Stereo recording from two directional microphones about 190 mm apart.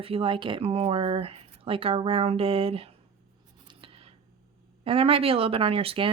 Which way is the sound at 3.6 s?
30° right (ahead or behind).